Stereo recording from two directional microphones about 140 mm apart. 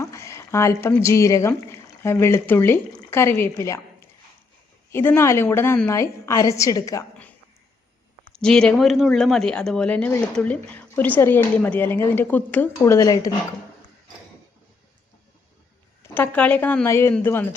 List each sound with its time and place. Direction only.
0.0 s a woman's voice: 20° left (ahead or behind)
8.4 s a woman's voice: 5° left (ahead or behind); by 13.3 s 25° left (ahead or behind)
16.0 s a woman's voice: 15° left (ahead or behind)